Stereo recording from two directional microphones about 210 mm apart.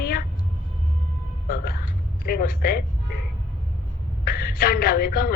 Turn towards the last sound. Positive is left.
turn(degrees=45)  # may be behind; listen again after turning